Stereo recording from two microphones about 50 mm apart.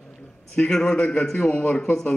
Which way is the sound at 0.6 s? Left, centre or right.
Centre.